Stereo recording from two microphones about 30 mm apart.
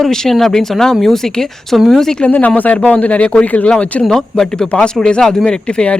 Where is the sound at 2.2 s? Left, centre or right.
Left.